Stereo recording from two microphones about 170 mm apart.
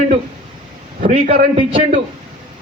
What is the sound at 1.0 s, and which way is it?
Speech, 50° right (ahead or behind).